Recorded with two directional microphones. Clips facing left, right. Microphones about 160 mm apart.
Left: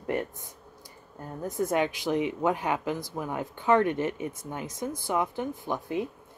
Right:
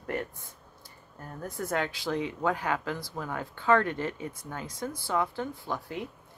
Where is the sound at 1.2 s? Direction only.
20° left (ahead or behind).